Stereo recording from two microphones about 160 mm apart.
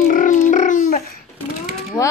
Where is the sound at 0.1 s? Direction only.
55° left (ahead or behind).